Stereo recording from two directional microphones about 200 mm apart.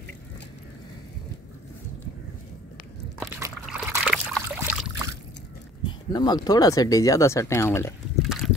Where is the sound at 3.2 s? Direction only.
15° right (ahead or behind).